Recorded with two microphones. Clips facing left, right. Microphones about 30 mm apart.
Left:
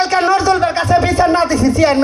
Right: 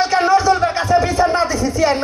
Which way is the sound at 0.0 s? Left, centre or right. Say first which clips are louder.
Left 1 dB; left.